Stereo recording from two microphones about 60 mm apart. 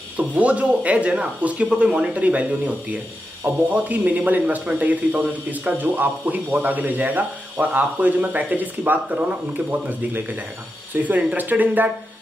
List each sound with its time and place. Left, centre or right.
0.2 s speech: right